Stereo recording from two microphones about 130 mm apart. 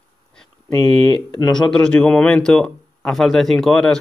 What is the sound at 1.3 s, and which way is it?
Speech, 35° left (ahead or behind).